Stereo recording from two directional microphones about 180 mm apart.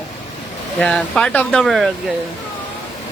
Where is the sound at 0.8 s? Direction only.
5° left (ahead or behind).